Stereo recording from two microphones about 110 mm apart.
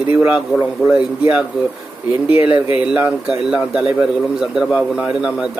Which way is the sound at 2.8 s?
10° right (ahead or behind).